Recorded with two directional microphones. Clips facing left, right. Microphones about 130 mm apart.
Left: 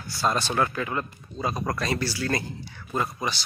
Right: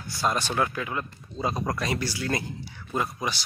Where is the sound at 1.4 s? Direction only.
25° right (ahead or behind).